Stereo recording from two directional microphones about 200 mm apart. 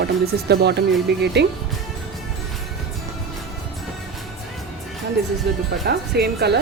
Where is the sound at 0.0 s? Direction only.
55° right (ahead or behind).